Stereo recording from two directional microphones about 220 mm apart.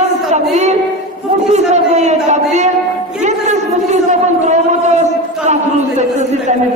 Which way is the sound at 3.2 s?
30° right (ahead or behind).